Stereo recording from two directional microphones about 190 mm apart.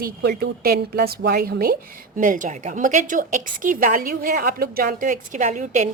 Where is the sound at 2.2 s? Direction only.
45° right (ahead or behind).